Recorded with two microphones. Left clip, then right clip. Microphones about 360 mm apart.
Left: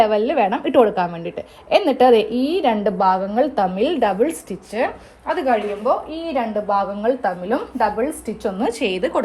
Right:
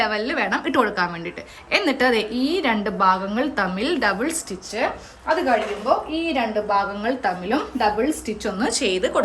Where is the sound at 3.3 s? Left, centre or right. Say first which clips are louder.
Left 5 dB; centre.